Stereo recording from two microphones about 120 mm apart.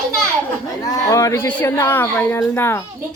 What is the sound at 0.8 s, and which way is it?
A woman's voice, 25° left (ahead or behind).